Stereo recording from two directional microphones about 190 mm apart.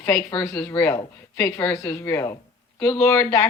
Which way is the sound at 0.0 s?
10° left (ahead or behind).